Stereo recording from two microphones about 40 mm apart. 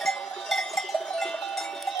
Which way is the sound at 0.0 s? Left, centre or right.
Centre.